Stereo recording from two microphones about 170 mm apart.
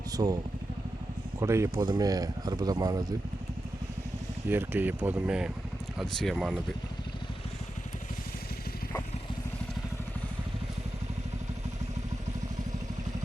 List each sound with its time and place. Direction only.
0.2 s speech: 25° right (ahead or behind)
1.4 s speech: 15° right (ahead or behind)
4.4 s speech: 10° right (ahead or behind)